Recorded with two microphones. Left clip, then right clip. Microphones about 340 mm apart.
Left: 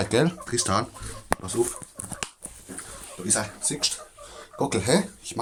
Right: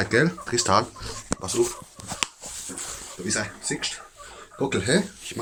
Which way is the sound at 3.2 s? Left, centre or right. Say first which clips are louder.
Even; centre.